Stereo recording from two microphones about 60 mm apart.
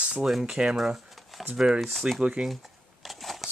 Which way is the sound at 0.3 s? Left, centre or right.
Centre.